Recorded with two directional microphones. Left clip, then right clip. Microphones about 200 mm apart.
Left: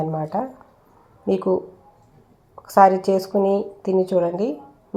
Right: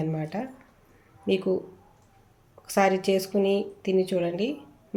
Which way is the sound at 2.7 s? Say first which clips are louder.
Left 8 dB; 5° left (ahead or behind).